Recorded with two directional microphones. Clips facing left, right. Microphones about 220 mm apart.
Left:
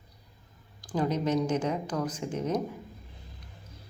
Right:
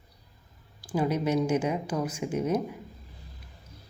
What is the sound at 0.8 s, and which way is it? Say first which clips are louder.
Speech: right 1 dB; 10° right (ahead or behind).